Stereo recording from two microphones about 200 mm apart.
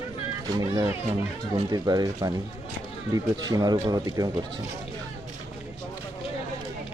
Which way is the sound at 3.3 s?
20° right (ahead or behind).